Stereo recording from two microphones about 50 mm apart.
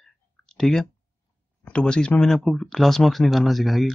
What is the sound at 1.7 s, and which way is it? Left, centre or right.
Speech, centre.